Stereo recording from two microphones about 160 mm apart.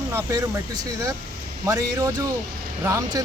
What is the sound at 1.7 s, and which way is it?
Speech, 20° right (ahead or behind).